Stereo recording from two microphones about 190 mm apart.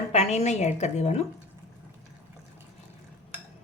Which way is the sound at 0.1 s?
35° left (ahead or behind).